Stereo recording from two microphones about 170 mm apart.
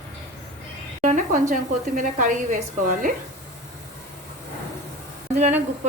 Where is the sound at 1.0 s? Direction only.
50° right (ahead or behind).